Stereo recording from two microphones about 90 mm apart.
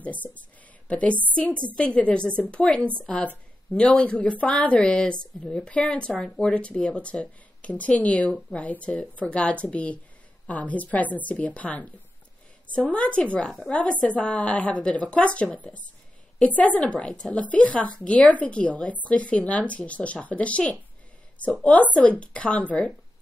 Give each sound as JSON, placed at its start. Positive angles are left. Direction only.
{"t": 0.8, "sound": "a woman's voice", "side_deg": 15}
{"t": 12.9, "sound": "speech", "side_deg": 15}